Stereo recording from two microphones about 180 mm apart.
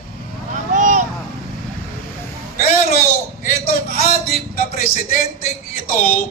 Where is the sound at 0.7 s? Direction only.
45° right (ahead or behind).